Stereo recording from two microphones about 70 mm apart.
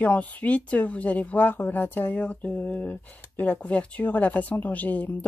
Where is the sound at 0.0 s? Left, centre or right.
Left.